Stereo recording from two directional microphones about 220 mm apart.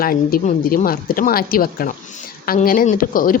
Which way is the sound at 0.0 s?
40° left (ahead or behind).